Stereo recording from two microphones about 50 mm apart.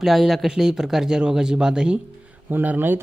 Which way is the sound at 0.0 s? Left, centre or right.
Centre.